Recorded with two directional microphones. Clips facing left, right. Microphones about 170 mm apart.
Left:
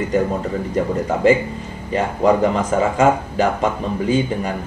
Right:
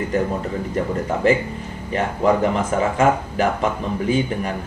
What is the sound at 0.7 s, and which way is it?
Speech, 15° left (ahead or behind).